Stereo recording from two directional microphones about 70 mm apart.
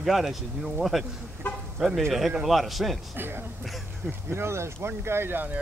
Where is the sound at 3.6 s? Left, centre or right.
Centre.